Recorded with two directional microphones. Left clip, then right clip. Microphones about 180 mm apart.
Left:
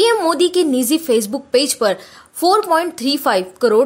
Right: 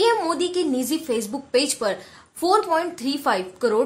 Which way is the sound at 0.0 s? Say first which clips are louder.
Left 6 dB; 30° left (ahead or behind).